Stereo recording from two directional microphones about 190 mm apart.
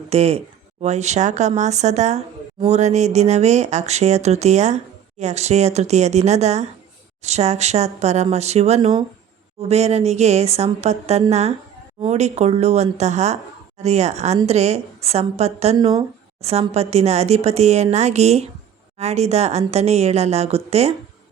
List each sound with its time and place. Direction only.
0.1 s a woman's voice: 35° right (ahead or behind)